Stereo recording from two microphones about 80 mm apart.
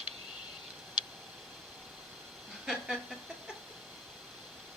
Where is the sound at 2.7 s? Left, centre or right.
Centre.